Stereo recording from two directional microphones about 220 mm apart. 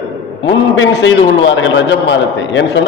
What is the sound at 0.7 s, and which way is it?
A man's voice, 55° left (ahead or behind).